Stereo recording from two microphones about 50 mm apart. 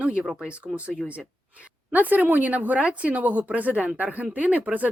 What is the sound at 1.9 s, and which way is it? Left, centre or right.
Speech, right.